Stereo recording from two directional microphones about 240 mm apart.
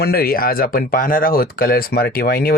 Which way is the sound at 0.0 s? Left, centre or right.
Left.